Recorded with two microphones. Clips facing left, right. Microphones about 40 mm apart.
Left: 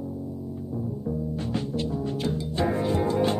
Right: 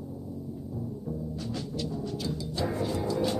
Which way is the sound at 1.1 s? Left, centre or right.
Left.